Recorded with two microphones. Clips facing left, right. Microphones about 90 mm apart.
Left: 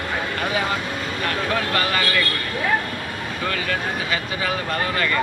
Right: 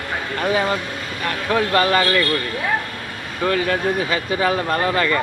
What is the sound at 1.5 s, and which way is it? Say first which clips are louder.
Speech: right 9 dB; 30° right (ahead or behind).